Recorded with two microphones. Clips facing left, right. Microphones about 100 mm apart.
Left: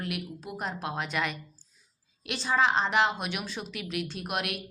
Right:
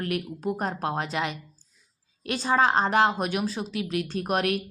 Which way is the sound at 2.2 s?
45° right (ahead or behind).